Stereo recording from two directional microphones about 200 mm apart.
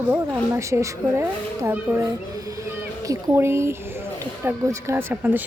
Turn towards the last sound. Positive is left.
turn(degrees=-10)  # may be behind; listen again after turning